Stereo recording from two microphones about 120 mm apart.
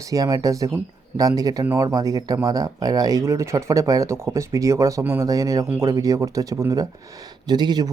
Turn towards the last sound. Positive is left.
turn(degrees=-35)  # may be behind; listen again after turning